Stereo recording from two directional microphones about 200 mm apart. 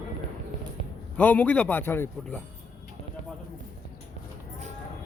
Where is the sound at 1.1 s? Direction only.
5° left (ahead or behind).